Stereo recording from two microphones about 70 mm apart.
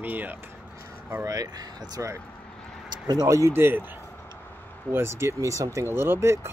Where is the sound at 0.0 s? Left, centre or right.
Right.